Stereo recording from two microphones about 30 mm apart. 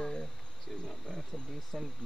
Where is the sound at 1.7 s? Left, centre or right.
Centre.